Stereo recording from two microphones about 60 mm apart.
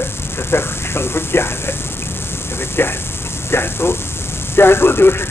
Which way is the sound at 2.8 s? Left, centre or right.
Left.